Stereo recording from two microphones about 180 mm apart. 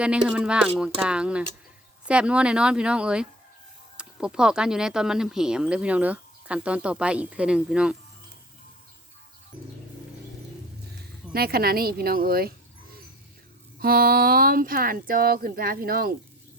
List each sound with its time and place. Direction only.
0.0 s speech: 5° right (ahead or behind)
11.3 s speech: 60° right (ahead or behind)
13.7 s speech: 55° right (ahead or behind)